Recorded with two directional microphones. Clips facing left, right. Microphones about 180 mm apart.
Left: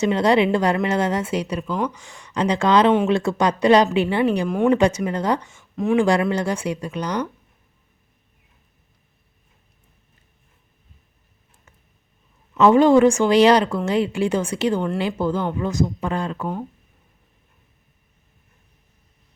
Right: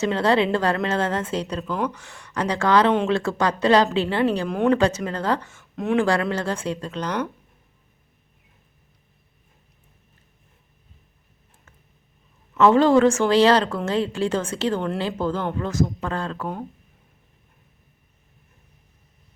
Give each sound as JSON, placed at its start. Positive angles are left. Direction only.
{"t": 0.0, "sound": "a woman's voice", "side_deg": 15}
{"t": 4.4, "sound": "speech", "side_deg": 0}
{"t": 4.7, "sound": "a woman's voice", "side_deg": 15}
{"t": 5.7, "sound": "speech", "side_deg": 0}
{"t": 6.0, "sound": "a woman's voice", "side_deg": 15}
{"t": 12.5, "sound": "a woman's voice", "side_deg": 15}